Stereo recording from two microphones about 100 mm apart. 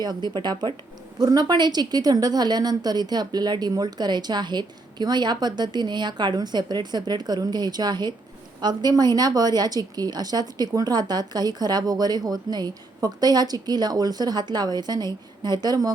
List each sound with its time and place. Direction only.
0.0 s a woman's voice: 45° right (ahead or behind)